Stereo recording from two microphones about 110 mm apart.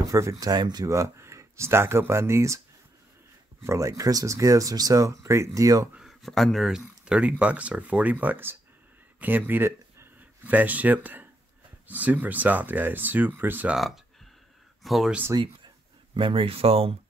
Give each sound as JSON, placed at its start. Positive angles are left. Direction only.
{"t": 0.0, "sound": "speech", "side_deg": -30}
{"t": 3.6, "sound": "speech", "side_deg": -30}
{"t": 5.9, "sound": "speech", "side_deg": 0}
{"t": 6.8, "sound": "speech", "side_deg": -10}
{"t": 13.7, "sound": "speech", "side_deg": 0}
{"t": 16.2, "sound": "speech", "side_deg": -50}